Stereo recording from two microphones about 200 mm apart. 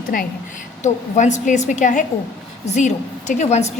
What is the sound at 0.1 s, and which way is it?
A woman's voice, 45° left (ahead or behind).